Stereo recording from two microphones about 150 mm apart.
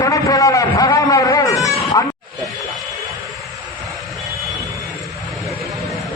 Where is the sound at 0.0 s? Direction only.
20° left (ahead or behind).